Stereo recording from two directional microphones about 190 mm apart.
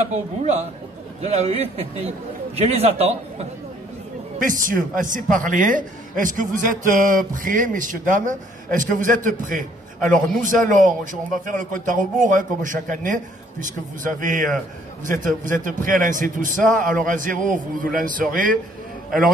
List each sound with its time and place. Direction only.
1.2 s a man's voice: 35° right (ahead or behind)
4.4 s a man's voice: 45° right (ahead or behind)